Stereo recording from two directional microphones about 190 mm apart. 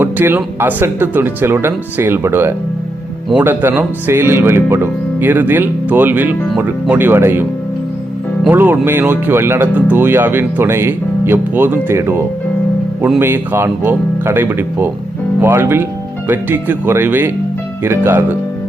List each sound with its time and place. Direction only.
0.0 s speech: 10° right (ahead or behind)
8.4 s speech: 10° right (ahead or behind)